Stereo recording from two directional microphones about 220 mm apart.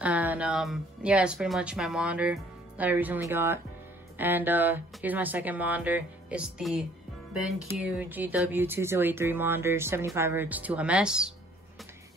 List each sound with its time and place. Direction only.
0.0 s speech: 5° right (ahead or behind)